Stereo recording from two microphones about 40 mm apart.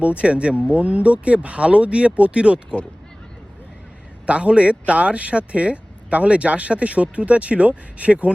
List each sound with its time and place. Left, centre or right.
0.0 s speech: right
4.3 s speech: right